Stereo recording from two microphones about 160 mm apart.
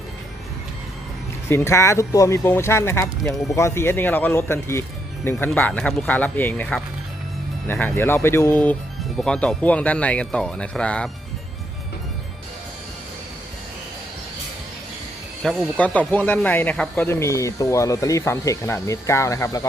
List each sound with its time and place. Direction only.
1.5 s speech: 15° left (ahead or behind)
15.4 s speech: 5° left (ahead or behind)